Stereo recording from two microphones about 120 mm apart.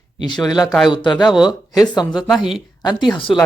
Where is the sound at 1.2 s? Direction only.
5° right (ahead or behind).